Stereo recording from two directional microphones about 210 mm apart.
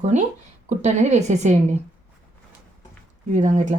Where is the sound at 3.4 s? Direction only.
35° right (ahead or behind).